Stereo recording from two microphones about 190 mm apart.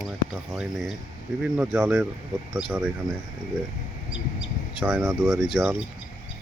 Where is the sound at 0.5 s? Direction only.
Centre (ahead or behind).